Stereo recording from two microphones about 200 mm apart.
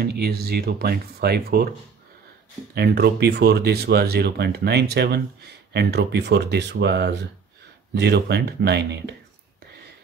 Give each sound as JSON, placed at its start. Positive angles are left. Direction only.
{"t": 0.0, "sound": "speech", "side_deg": -50}
{"t": 2.7, "sound": "speech", "side_deg": -55}